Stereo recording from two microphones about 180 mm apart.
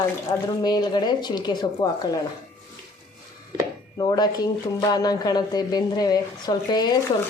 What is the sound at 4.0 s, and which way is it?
Speech, 20° left (ahead or behind).